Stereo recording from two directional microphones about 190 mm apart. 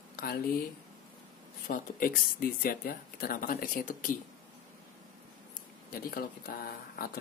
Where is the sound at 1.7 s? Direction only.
50° left (ahead or behind).